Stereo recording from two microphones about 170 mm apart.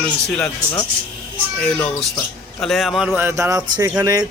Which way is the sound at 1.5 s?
5° left (ahead or behind).